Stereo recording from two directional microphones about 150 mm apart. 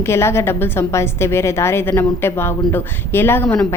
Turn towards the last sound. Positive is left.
turn(degrees=10)  # may be behind; listen again after turning